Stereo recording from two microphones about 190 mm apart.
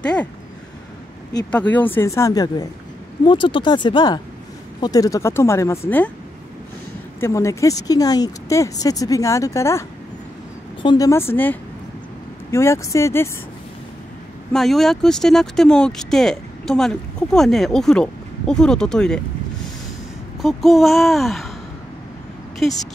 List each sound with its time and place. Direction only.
0.0 s speech: 5° left (ahead or behind)
1.5 s speech: 5° left (ahead or behind)
7.2 s speech: 15° left (ahead or behind)
14.5 s speech: centre (ahead or behind)
20.4 s speech: centre (ahead or behind)
22.6 s speech: centre (ahead or behind)